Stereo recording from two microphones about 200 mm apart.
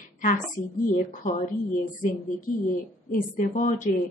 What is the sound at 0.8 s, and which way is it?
Speech, 40° left (ahead or behind).